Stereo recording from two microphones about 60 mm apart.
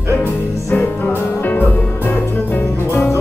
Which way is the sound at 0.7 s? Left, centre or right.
Left.